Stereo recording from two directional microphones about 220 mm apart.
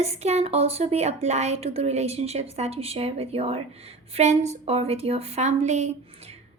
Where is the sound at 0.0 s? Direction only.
30° right (ahead or behind).